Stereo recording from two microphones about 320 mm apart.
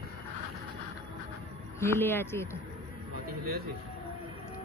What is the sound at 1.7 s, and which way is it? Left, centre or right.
Speech, centre.